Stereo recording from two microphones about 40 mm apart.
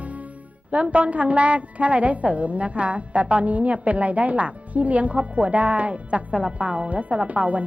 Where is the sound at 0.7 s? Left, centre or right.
Right.